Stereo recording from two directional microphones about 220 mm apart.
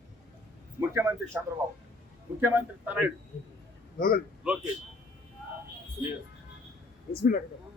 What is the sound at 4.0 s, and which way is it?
Speech, 40° left (ahead or behind).